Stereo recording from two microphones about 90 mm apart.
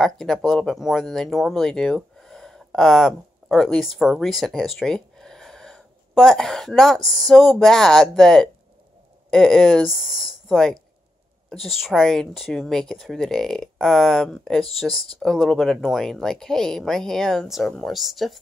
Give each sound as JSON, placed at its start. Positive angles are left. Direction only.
{"t": 0.0, "sound": "speech", "side_deg": 5}